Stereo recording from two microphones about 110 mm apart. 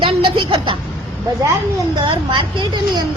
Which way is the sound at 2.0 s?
50° right (ahead or behind).